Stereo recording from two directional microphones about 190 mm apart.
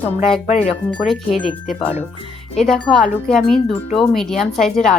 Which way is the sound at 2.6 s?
Centre (ahead or behind).